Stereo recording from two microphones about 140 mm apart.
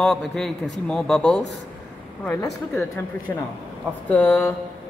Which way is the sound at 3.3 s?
20° left (ahead or behind).